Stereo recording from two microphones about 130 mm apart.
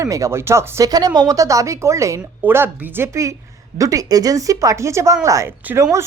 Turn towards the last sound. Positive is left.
turn(degrees=-15)  # may be behind; listen again after turning